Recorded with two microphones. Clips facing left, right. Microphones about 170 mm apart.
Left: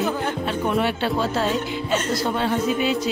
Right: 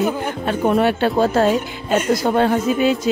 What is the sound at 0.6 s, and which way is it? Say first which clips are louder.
Speech: right 7 dB; 45° right (ahead or behind).